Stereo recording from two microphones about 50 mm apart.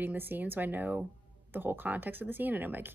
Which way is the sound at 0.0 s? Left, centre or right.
Right.